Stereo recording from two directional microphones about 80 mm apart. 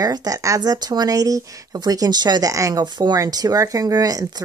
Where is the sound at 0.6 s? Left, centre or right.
Right.